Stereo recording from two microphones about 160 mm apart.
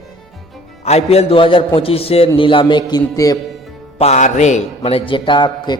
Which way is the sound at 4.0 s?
45° left (ahead or behind).